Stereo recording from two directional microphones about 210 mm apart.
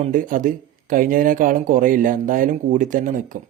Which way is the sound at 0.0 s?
40° right (ahead or behind).